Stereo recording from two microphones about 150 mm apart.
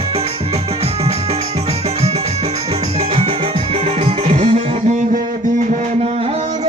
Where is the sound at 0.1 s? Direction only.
40° right (ahead or behind).